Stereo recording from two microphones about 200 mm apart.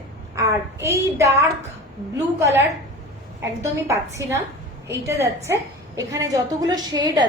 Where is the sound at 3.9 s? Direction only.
15° right (ahead or behind).